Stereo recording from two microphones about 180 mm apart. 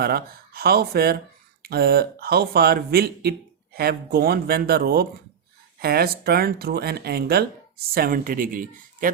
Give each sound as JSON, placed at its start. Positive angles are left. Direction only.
{"t": 0.0, "sound": "a man's voice", "side_deg": -60}